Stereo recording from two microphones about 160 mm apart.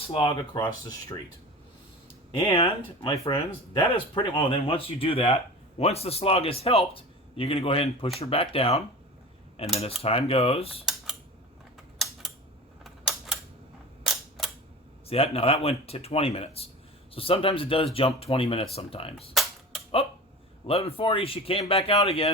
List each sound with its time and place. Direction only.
0.1 s a man's voice: 30° left (ahead or behind)
2.3 s a man's voice: 35° left (ahead or behind)
10.8 s cutlery: 5° right (ahead or behind)
12.8 s typewriter: 5° right (ahead or behind)
14.0 s camera: centre (ahead or behind)
15.0 s a man's voice: 40° left (ahead or behind)
19.1 s cap gun: centre (ahead or behind)
20.7 s a man's voice: 40° left (ahead or behind)